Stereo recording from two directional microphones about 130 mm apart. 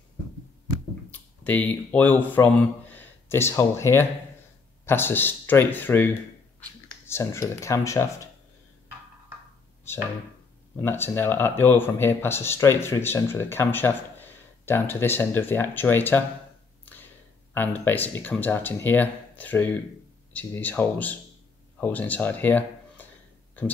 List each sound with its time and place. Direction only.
1.1 s speech: 10° left (ahead or behind)
10.8 s speech: 15° left (ahead or behind)
16.8 s a sound: 15° left (ahead or behind)
17.6 s speech: 15° left (ahead or behind)